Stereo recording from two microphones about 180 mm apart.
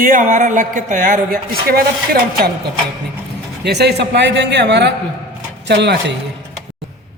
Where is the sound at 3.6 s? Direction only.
65° right (ahead or behind).